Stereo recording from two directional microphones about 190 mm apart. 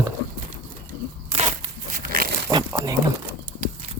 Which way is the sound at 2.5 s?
20° right (ahead or behind).